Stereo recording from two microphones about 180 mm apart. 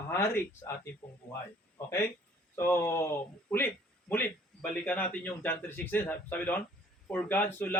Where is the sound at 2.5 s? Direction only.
15° left (ahead or behind).